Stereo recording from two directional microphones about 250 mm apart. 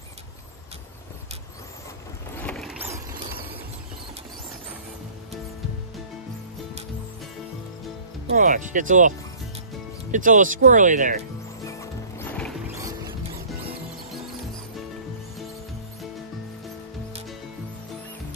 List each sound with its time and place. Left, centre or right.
2.3 s boat: centre
8.4 s speech: right
10.1 s speech: right
11.6 s music: centre